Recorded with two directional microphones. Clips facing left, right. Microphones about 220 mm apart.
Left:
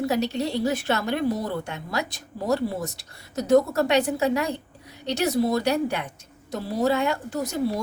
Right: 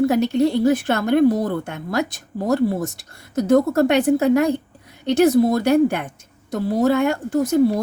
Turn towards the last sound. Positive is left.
turn(degrees=-50)  # may be behind; listen again after turning